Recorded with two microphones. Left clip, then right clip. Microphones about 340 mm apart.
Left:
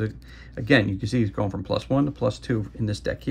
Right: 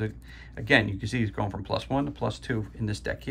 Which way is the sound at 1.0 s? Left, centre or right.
Centre.